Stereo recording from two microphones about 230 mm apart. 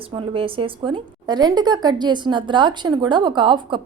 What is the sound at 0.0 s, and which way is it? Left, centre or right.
A woman's voice, right.